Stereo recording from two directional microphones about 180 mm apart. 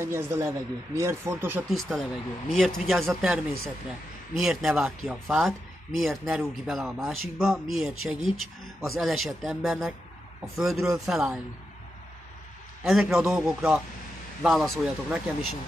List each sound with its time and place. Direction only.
0.0 s speech: 15° right (ahead or behind)
1.7 s speech: centre (ahead or behind)
12.8 s speech: centre (ahead or behind)